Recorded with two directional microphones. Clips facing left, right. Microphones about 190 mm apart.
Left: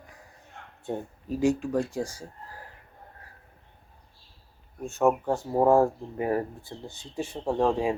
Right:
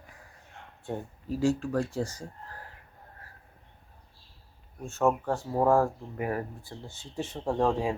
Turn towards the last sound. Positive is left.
turn(degrees=10)  # may be behind; listen again after turning